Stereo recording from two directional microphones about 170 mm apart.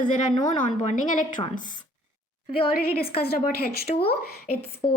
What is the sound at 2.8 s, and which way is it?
A woman's voice, 60° left (ahead or behind).